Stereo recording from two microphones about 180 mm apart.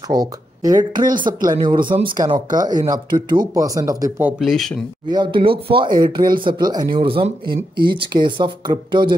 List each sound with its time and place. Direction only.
0.1 s speech: 20° right (ahead or behind)
4.3 s speech: centre (ahead or behind)
5.0 s speech: 25° right (ahead or behind)